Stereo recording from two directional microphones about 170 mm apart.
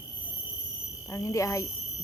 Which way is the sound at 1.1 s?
20° left (ahead or behind).